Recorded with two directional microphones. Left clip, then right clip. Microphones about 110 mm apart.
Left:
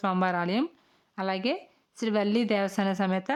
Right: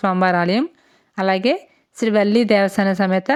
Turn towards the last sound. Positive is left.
turn(degrees=-40)  # may be behind; listen again after turning